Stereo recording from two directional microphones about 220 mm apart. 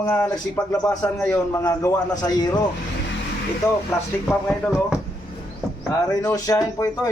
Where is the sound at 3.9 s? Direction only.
15° left (ahead or behind).